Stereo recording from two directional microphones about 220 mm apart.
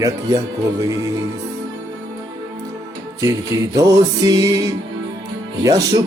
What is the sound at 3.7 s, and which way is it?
Speech, 15° right (ahead or behind).